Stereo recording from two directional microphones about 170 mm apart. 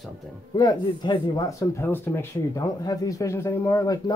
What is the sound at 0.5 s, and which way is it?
Speech, 20° left (ahead or behind).